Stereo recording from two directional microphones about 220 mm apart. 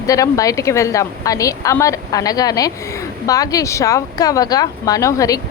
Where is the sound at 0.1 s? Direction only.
15° left (ahead or behind).